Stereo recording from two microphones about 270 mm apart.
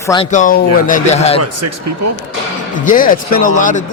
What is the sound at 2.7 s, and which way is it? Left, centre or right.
Speech, left.